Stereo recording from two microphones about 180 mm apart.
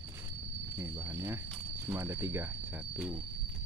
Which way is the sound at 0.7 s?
10° right (ahead or behind).